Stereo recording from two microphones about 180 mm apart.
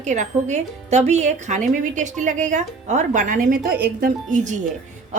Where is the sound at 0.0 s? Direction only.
40° right (ahead or behind).